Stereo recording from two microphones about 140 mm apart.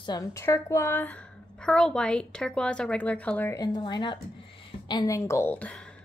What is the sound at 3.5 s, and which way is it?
Speech, 30° left (ahead or behind).